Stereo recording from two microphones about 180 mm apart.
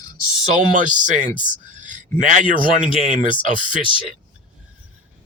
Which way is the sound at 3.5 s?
45° right (ahead or behind).